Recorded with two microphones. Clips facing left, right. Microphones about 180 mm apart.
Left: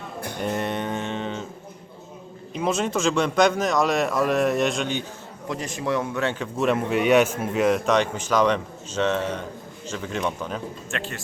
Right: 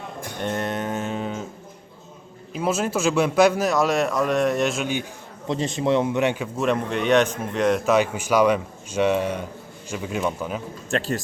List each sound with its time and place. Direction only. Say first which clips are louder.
0.4 s a man's voice: right 1 dB; centre (ahead or behind)
2.5 s a man's voice: right 1 dB; 5° right (ahead or behind)
5.5 s a man's voice: right 5 dB; 25° right (ahead or behind)
6.6 s a man's voice: left 2 dB; 5° left (ahead or behind)
10.9 s speech: right 9 dB; 35° right (ahead or behind)